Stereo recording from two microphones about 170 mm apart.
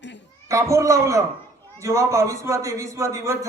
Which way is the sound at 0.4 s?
20° right (ahead or behind).